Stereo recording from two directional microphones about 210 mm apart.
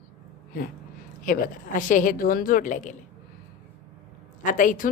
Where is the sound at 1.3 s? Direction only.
40° left (ahead or behind).